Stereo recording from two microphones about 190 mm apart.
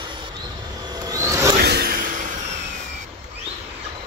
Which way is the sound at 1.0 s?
15° right (ahead or behind).